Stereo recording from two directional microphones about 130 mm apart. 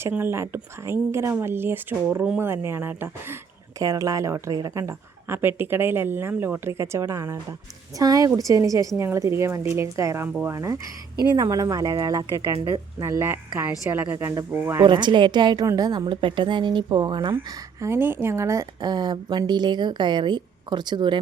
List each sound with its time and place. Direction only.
0.0 s a woman's voice: 20° right (ahead or behind)
2.4 s a woman's voice: 20° right (ahead or behind)
14.8 s a woman's voice: 35° right (ahead or behind)
17.3 s a woman's voice: 20° right (ahead or behind); by 21.2 s 35° right (ahead or behind)